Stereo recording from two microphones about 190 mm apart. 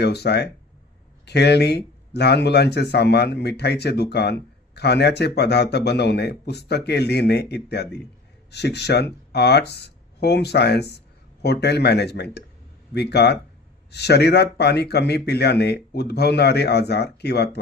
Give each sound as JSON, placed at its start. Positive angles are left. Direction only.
{"t": 0.0, "sound": "speech", "side_deg": 60}